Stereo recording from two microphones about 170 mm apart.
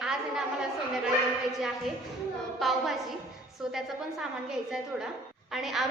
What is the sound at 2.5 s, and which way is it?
A woman's voice, centre (ahead or behind).